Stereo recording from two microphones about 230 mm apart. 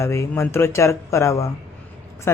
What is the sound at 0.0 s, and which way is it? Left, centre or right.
Speech, centre.